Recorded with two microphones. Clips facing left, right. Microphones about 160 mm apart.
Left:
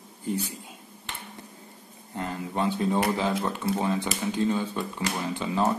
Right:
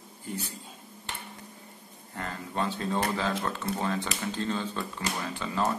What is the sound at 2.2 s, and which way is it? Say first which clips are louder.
Speech: left 3 dB; 15° left (ahead or behind).